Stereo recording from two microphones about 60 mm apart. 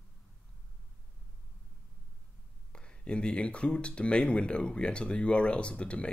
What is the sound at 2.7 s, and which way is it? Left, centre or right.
Speech, centre.